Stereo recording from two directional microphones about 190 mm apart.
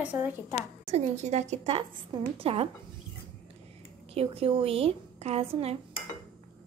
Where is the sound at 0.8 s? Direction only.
35° right (ahead or behind).